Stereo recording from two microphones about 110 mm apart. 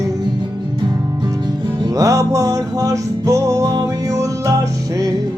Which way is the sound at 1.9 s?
30° right (ahead or behind).